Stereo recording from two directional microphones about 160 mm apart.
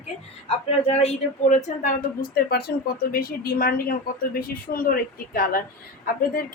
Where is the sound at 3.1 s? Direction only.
70° left (ahead or behind).